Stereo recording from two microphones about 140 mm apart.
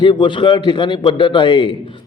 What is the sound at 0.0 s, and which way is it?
Speech, 35° left (ahead or behind).